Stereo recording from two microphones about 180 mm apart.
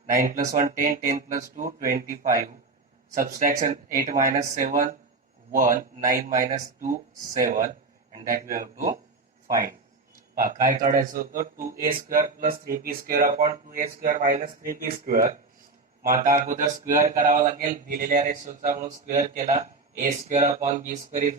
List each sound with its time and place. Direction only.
0.2 s speech: 50° right (ahead or behind)
9.5 s speech: 50° right (ahead or behind)